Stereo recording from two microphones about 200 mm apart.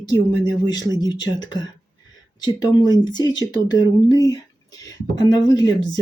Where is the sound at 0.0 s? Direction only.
20° left (ahead or behind).